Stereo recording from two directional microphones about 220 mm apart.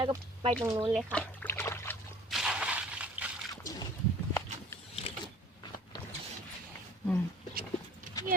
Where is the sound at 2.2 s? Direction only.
Centre (ahead or behind).